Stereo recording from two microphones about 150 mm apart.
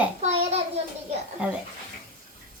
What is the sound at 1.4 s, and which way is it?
Speech, 10° right (ahead or behind).